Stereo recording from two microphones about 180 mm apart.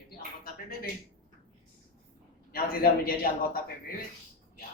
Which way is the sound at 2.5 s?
55° left (ahead or behind).